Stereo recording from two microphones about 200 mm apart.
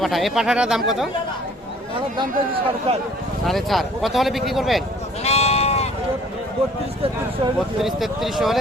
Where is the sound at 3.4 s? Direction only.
Centre (ahead or behind).